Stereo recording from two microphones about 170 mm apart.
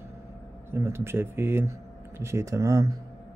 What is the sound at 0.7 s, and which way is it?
Speech, 15° right (ahead or behind).